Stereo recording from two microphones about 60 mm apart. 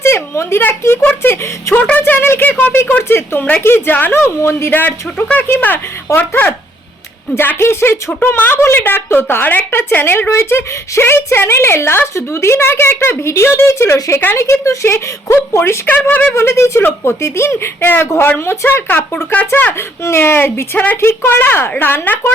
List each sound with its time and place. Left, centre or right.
0.0 s a sound: left
1.2 s speech: left
4.2 s speech: left
4.7 s speech: left
7.3 s speech: left
14.8 s speech: left
15.9 s speech: left
16.3 s speech: left
20.1 s speech: left
20.7 s speech: left
21.0 s speech: left